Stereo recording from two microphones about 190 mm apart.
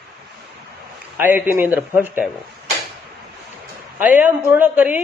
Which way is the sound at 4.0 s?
10° right (ahead or behind).